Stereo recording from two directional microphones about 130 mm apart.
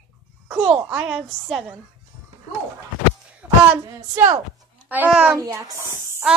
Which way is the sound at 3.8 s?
20° right (ahead or behind).